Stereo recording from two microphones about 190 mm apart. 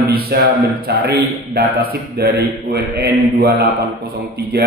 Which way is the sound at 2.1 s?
55° right (ahead or behind).